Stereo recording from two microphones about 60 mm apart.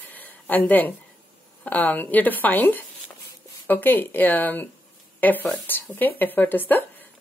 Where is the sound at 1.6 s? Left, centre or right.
Left.